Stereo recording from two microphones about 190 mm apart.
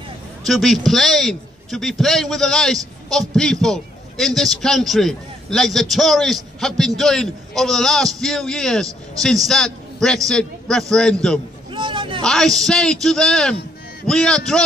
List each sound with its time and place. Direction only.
0.5 s a man's voice: centre (ahead or behind)
11.7 s a sound: 25° right (ahead or behind)
12.2 s a man's voice: centre (ahead or behind)